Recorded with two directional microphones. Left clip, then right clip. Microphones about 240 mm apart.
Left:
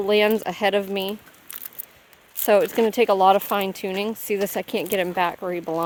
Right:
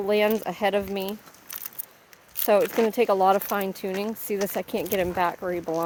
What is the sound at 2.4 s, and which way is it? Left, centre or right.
Speech, left.